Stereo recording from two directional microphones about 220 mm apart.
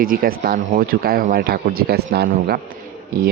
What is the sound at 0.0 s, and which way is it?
A man's voice, 40° right (ahead or behind).